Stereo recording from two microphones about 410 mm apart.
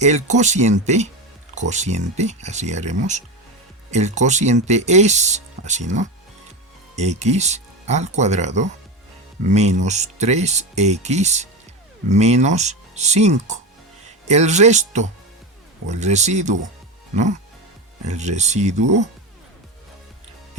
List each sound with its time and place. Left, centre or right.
0.0 s speech: centre
18.0 s speech: centre